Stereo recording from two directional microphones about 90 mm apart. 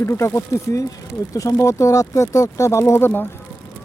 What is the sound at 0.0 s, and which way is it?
Speech, 30° left (ahead or behind).